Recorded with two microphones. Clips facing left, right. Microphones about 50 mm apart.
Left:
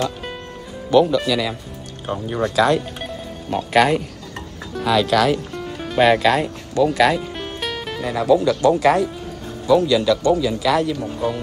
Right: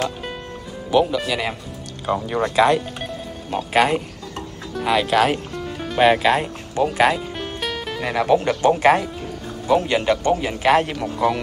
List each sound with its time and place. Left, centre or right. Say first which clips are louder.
0.0 s music: left 1 dB; centre
0.9 s speech: left 3 dB; centre
2.6 s speech: right 1 dB; right
3.0 s music: even; centre
3.7 s speech: left 2 dB; centre
5.5 s music: even; centre
5.9 s speech: left 1 dB; centre
7.2 s music: left 1 dB; centre
8.0 s speech: left 2 dB; right
11.0 s speech: right 3 dB; right